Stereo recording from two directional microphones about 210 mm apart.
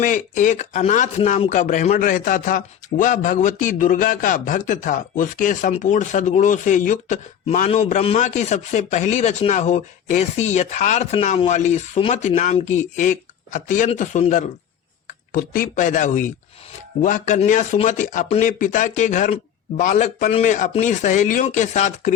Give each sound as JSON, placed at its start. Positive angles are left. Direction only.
{"t": 0.0, "sound": "speech", "side_deg": 35}